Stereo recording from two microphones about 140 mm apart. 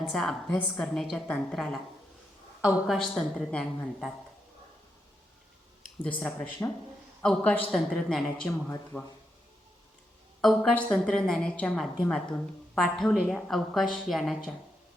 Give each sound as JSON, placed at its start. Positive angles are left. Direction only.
{"t": 0.1, "sound": "a woman's voice", "side_deg": 5}
{"t": 6.0, "sound": "a man's voice", "side_deg": 10}
{"t": 7.2, "sound": "a man's voice", "side_deg": 10}
{"t": 8.4, "sound": "speech", "side_deg": 20}
{"t": 10.4, "sound": "a woman's voice", "side_deg": 5}